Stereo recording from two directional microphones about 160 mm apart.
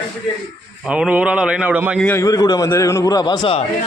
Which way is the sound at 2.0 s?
10° left (ahead or behind).